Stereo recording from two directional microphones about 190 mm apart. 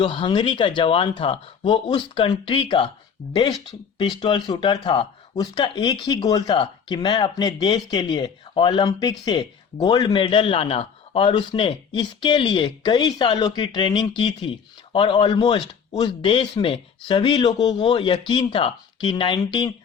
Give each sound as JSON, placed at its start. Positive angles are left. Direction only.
{"t": 0.0, "sound": "speech", "side_deg": 25}
{"t": 3.9, "sound": "speech", "side_deg": 25}